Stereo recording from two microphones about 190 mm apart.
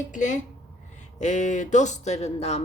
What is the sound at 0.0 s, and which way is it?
Speech, 40° left (ahead or behind).